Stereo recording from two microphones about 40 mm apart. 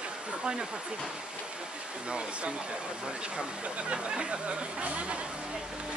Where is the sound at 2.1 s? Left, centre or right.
Right.